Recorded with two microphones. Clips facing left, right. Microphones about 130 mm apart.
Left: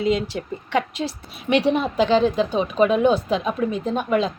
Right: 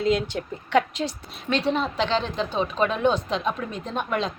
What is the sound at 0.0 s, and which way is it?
A woman's voice, centre (ahead or behind).